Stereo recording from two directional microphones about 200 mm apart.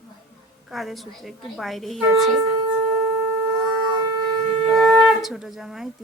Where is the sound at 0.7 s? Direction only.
Centre (ahead or behind).